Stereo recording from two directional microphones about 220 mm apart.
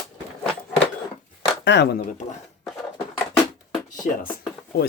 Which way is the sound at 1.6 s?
50° left (ahead or behind).